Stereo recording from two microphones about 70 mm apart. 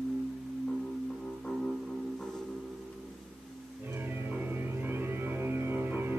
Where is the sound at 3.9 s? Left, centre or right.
Right.